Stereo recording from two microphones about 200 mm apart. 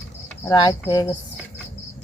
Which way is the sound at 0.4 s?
20° left (ahead or behind).